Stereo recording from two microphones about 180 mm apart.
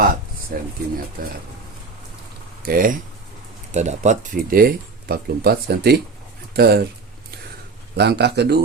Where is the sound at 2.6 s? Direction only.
50° right (ahead or behind).